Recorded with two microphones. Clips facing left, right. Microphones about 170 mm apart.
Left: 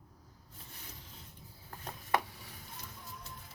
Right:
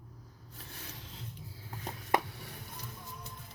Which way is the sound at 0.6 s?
90° right.